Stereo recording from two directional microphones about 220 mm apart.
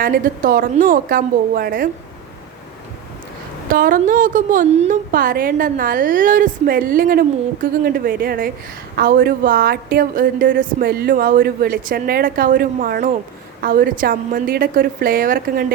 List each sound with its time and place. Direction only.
0.0 s a woman's voice: 40° right (ahead or behind)
3.7 s a woman's voice: 40° right (ahead or behind)